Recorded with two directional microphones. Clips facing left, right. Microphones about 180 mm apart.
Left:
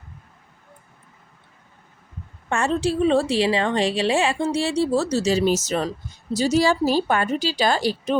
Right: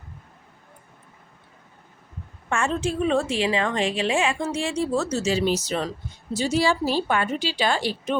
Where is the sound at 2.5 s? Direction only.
35° left (ahead or behind).